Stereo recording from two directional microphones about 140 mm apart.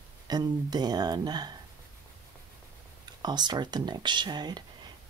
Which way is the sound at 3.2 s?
30° right (ahead or behind).